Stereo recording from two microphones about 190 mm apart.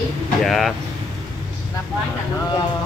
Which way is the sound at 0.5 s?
Centre (ahead or behind).